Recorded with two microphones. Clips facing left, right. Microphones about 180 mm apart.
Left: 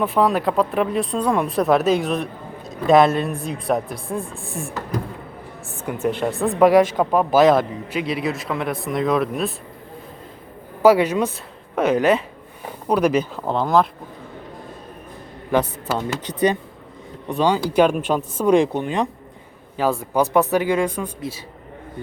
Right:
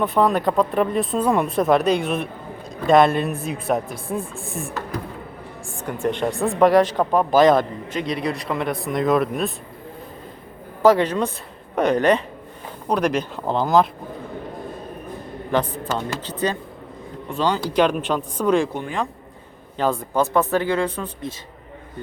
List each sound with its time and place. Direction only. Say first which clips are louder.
0.0 s speech: even; centre (ahead or behind)
5.8 s speech: left 1 dB; 5° left (ahead or behind)
10.8 s a woman's voice: left 1 dB; 10° left (ahead or behind)
15.5 s a woman's voice: left 2 dB; 10° left (ahead or behind)
19.7 s a woman's voice: left 1 dB; 5° left (ahead or behind)